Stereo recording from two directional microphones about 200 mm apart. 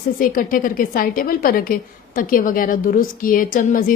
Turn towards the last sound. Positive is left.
turn(degrees=45)  # may be behind; listen again after turning